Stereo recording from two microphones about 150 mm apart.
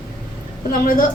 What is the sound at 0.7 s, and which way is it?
Speech, 70° left (ahead or behind).